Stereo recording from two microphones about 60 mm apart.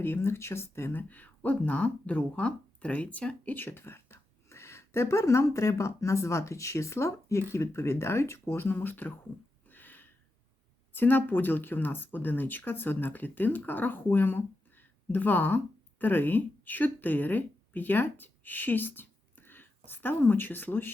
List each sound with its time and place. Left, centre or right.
0.0 s speech: left
1.0 s speech: left
9.6 s a sound: left
10.9 s speech: left